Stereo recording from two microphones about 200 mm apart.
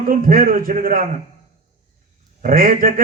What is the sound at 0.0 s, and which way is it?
A man's voice, 45° right (ahead or behind).